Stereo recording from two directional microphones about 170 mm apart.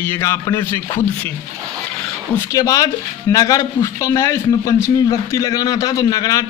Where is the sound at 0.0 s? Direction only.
15° left (ahead or behind).